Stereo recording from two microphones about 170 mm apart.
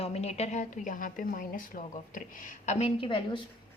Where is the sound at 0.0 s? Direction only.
40° left (ahead or behind).